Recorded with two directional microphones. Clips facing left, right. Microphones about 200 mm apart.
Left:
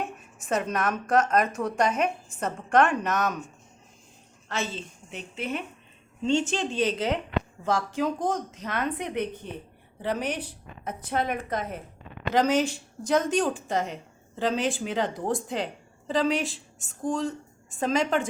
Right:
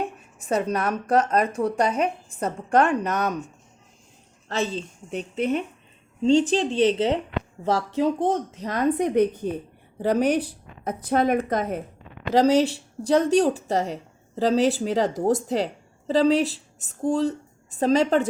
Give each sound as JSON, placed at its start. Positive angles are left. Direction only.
{"t": 0.0, "sound": "speech", "side_deg": -35}
{"t": 4.4, "sound": "a woman's voice", "side_deg": -35}